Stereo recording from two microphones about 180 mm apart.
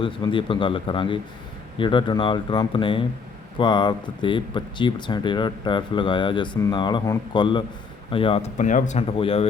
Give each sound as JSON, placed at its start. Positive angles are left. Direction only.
{"t": 0.0, "sound": "speech", "side_deg": 30}